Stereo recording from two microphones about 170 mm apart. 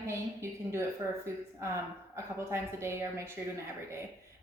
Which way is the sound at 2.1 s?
15° right (ahead or behind).